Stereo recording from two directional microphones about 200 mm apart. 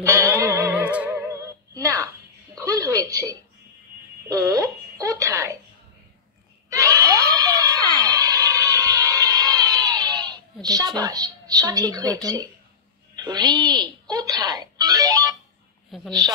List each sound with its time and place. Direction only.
0.0 s music: 15° right (ahead or behind)
2.5 s a sound: 15° right (ahead or behind)
3.1 s a woman's voice: 15° right (ahead or behind)
4.3 s a sound: 15° right (ahead or behind)
6.7 s screaming: 15° right (ahead or behind)
11.0 s a woman's voice: 20° right (ahead or behind)
15.9 s a woman's voice: centre (ahead or behind)